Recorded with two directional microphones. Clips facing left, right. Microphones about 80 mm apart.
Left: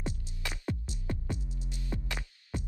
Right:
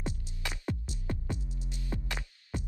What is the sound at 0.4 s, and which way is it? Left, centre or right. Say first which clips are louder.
Music: even; right.